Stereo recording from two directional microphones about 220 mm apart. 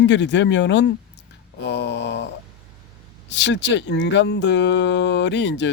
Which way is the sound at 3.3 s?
55° left (ahead or behind).